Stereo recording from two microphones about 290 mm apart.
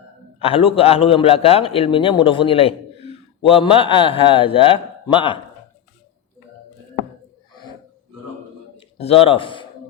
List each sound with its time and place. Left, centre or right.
0.3 s a man's voice: centre
9.0 s a man's voice: centre